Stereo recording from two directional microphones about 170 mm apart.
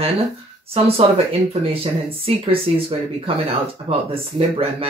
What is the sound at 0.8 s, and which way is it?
Speech, 35° right (ahead or behind).